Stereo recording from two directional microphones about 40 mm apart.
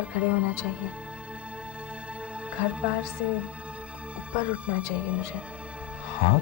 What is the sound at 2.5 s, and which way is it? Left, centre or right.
Speech, right.